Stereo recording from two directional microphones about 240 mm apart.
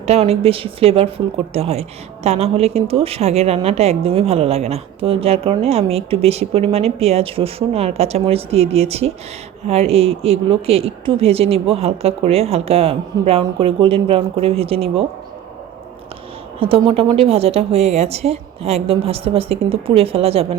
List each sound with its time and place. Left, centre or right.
0.0 s a woman's voice: right
16.6 s a woman's voice: right